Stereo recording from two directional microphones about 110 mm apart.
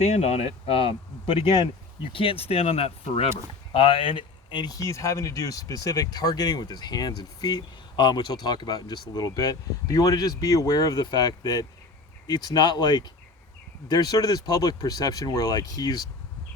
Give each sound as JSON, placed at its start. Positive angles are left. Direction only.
{"t": 0.0, "sound": "speech", "side_deg": 85}
{"t": 3.7, "sound": "speech", "side_deg": 55}